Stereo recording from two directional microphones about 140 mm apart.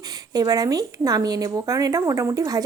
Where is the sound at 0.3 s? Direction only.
25° right (ahead or behind).